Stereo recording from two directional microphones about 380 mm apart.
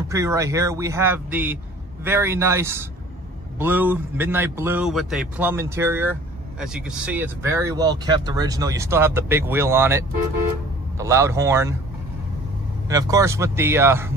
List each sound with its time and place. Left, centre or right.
0.1 s a man's voice: centre
12.8 s speech: centre